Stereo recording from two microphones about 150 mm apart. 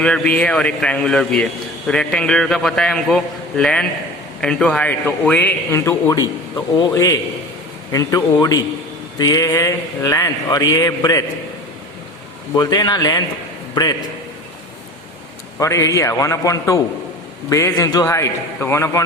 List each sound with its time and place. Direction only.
0.0 s a man's voice: 5° left (ahead or behind); by 11.2 s 25° left (ahead or behind)
12.5 s a man's voice: 25° left (ahead or behind)
15.5 s a man's voice: 20° left (ahead or behind)